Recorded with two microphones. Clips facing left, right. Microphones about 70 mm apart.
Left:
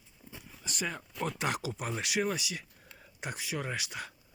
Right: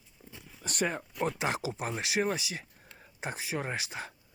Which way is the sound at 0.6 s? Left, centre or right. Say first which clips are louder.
Right 5 dB; right.